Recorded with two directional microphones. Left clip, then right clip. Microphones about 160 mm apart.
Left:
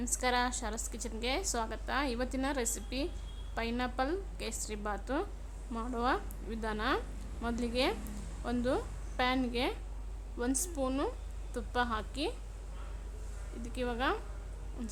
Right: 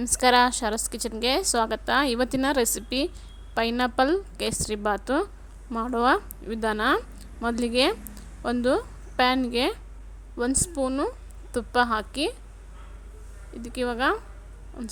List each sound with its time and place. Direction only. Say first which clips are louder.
0.0 s a woman's voice: right 12 dB; 45° right (ahead or behind); by 11.1 s 30° right (ahead or behind)
11.5 s speech: right 11 dB; 40° right (ahead or behind)
13.6 s speech: right 9 dB; 40° right (ahead or behind)